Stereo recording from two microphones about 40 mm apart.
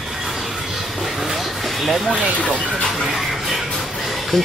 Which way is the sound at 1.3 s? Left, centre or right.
Centre.